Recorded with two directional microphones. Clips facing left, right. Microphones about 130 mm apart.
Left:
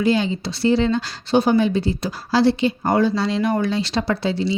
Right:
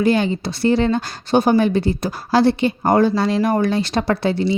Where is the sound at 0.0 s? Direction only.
55° right (ahead or behind).